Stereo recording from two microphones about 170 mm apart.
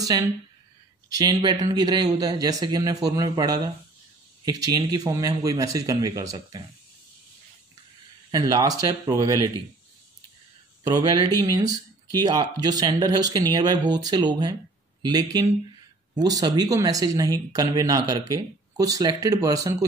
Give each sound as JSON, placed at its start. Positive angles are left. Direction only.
{"t": 0.0, "sound": "speech", "side_deg": -20}
{"t": 8.3, "sound": "speech", "side_deg": -20}
{"t": 10.8, "sound": "speech", "side_deg": -25}